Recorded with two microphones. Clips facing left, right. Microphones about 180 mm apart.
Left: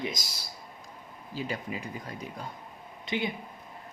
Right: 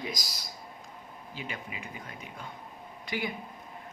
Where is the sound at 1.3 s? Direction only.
40° left (ahead or behind).